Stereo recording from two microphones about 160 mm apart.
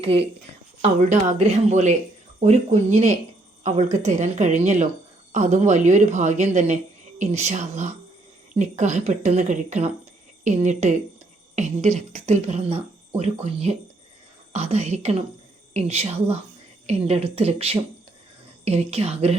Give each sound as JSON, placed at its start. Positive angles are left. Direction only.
{"t": 0.0, "sound": "a woman's voice", "side_deg": -35}
{"t": 0.8, "sound": "speech", "side_deg": -50}